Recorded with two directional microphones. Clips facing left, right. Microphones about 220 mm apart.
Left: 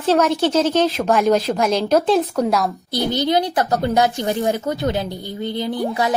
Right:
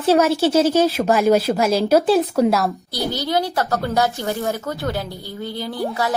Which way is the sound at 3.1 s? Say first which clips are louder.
Left 3 dB; 20° left (ahead or behind).